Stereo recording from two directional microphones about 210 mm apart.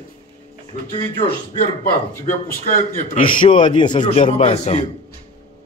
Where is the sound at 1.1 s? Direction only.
25° left (ahead or behind).